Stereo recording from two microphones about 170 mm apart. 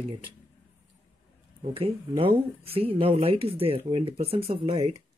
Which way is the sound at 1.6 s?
30° right (ahead or behind).